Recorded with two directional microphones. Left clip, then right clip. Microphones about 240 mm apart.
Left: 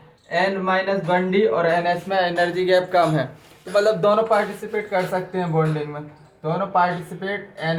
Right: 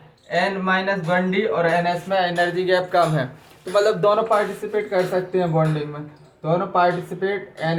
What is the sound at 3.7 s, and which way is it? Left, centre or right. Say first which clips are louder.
Speech: even; centre.